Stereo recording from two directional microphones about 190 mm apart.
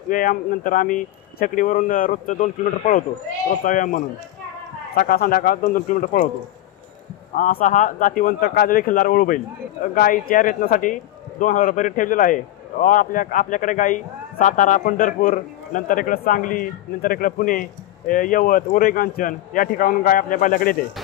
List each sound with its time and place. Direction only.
0.1 s a man's voice: 45° left (ahead or behind)
7.3 s a man's voice: 40° left (ahead or behind)